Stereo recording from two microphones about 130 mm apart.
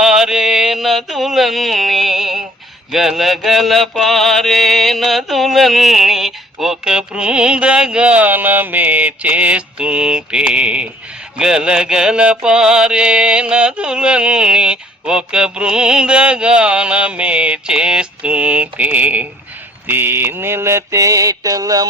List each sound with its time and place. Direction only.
0.0 s mantra: 5° right (ahead or behind)
11.3 s music: 5° right (ahead or behind)
19.9 s mantra: 15° right (ahead or behind)